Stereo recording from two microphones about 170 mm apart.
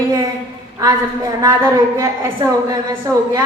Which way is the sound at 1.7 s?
20° right (ahead or behind).